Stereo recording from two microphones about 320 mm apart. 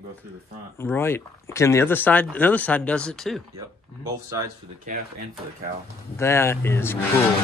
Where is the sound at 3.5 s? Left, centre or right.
Centre.